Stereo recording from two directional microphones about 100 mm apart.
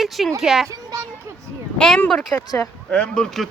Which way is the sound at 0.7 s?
30° right (ahead or behind).